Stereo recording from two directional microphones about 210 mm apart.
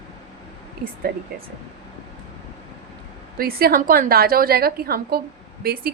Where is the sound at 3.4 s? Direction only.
45° right (ahead or behind).